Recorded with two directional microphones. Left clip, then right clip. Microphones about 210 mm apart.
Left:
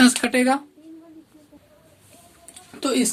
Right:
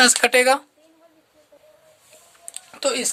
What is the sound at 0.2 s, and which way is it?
Speech, 50° right (ahead or behind).